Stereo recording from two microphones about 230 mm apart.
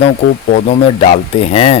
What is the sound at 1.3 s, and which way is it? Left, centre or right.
Speech, left.